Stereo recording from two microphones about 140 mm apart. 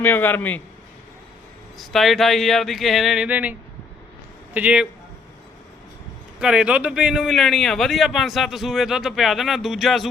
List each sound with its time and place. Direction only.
0.0 s a man's voice: 15° left (ahead or behind)
1.8 s a man's voice: centre (ahead or behind)
4.5 s speech: 10° right (ahead or behind)
6.4 s a man's voice: 5° right (ahead or behind)